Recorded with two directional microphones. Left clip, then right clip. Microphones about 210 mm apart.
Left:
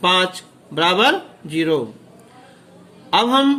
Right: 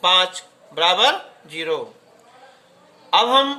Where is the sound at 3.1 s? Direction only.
10° left (ahead or behind).